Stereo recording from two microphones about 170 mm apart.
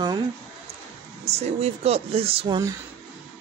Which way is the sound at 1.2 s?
40° right (ahead or behind).